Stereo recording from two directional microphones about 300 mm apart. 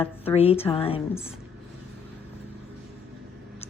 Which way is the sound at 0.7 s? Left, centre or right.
Centre.